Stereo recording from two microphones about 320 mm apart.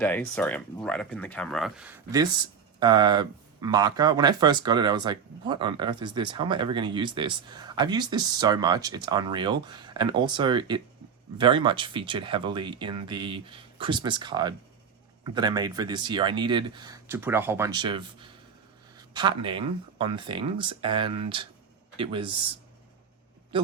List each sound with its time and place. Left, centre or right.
0.0 s speech: centre